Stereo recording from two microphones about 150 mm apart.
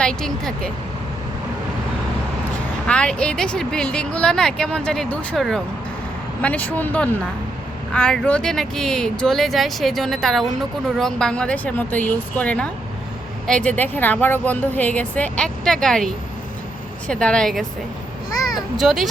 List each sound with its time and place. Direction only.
0.0 s speech: 5° left (ahead or behind)
2.8 s a woman's voice: 5° left (ahead or behind)